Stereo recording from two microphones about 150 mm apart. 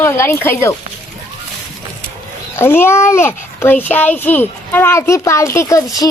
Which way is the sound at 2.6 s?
15° left (ahead or behind).